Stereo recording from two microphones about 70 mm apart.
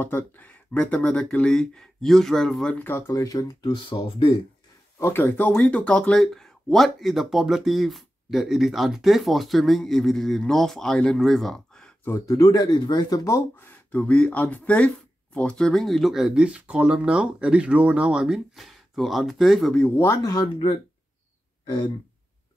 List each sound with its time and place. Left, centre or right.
0.0 s speech: left; by 2.7 s centre
2.7 s speech: left
3.1 s speech: left
3.9 s speech: left
4.9 s speech: left
5.2 s speech: left; by 11.9 s centre
12.3 s speech: left
13.2 s speech: left
13.9 s speech: centre
21.6 s a sound: left